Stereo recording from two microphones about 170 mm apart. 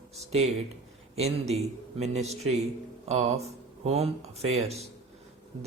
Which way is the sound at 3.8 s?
35° right (ahead or behind).